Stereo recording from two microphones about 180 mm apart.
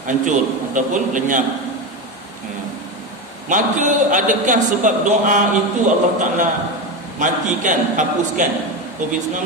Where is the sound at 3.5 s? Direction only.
45° right (ahead or behind).